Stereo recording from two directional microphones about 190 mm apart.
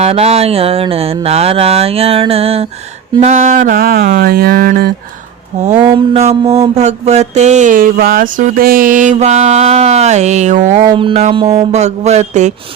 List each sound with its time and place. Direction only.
0.0 s mantra: 35° right (ahead or behind)
3.2 s a sound: 35° right (ahead or behind); by 4.9 s 50° right (ahead or behind)
5.8 s music: 20° right (ahead or behind)
6.1 s mantra: 35° right (ahead or behind)
10.8 s music: 25° right (ahead or behind)
11.5 s mantra: 35° right (ahead or behind)